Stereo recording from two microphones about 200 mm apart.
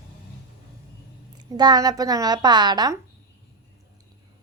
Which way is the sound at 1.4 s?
20° right (ahead or behind).